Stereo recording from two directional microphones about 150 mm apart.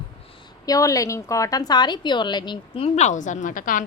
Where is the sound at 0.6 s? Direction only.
25° left (ahead or behind); by 3.8 s 60° left (ahead or behind).